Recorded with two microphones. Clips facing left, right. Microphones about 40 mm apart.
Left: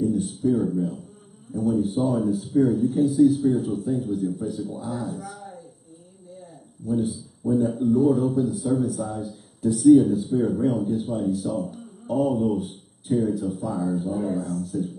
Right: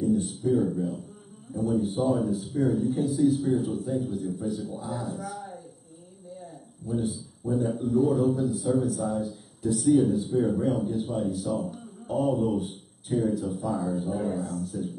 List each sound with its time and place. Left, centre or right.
0.0 s speech: centre
2.0 s speech: centre
7.0 s speech: centre